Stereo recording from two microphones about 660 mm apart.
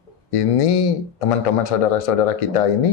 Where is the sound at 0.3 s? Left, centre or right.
Left.